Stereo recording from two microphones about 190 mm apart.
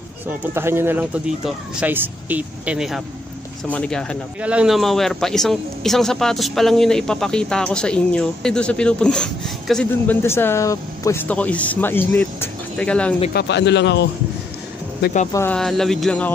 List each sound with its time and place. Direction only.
0.4 s speech: 10° right (ahead or behind)
3.6 s a man's voice: 5° left (ahead or behind)
4.4 s a man's voice: 5° right (ahead or behind)
13.3 s speech: 60° left (ahead or behind)
15.3 s a man's voice: 10° left (ahead or behind)